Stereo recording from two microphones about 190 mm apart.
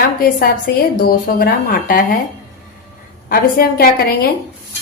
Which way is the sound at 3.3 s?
50° left (ahead or behind).